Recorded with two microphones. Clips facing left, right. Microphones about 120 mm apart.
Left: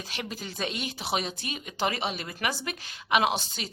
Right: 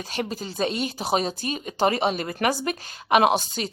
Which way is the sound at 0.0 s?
40° right (ahead or behind).